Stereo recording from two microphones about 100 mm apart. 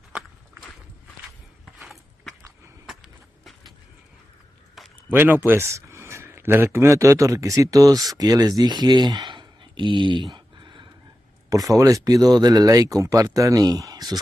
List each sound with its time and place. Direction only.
1.8 s a sound: centre (ahead or behind)
5.1 s speech: 20° right (ahead or behind); by 10.9 s 55° right (ahead or behind)
11.4 s speech: 35° right (ahead or behind)